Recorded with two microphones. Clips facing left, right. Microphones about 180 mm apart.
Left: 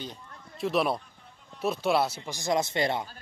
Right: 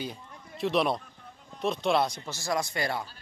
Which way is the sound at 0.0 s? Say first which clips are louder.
Right 3 dB; 10° right (ahead or behind).